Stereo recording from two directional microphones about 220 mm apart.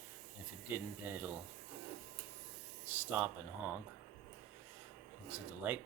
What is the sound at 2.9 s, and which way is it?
Speech, 10° right (ahead or behind).